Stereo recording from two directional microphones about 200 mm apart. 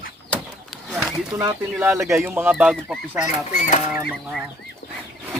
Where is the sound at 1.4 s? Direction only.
10° right (ahead or behind).